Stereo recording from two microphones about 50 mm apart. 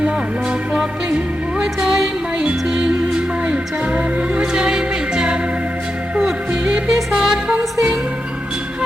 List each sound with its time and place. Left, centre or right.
1.5 s music: centre